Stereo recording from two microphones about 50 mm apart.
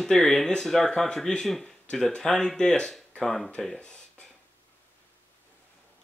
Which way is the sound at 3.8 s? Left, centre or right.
Left.